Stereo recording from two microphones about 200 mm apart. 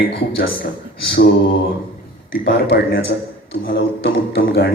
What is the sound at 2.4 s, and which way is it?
Speech, 55° left (ahead or behind).